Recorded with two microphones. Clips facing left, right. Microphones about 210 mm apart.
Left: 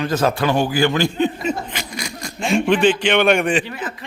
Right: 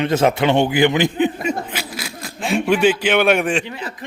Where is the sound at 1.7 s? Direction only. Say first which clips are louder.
Even; 5° right (ahead or behind).